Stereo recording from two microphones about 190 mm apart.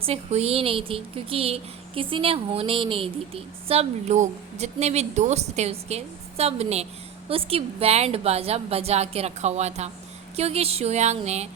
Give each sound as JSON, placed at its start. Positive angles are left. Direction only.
{"t": 0.0, "sound": "a woman's voice", "side_deg": -35}